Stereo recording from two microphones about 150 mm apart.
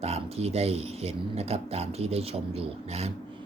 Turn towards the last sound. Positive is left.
turn(degrees=-45)  # may be behind; listen again after turning